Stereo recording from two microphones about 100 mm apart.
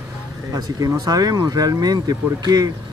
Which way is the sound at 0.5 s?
35° right (ahead or behind).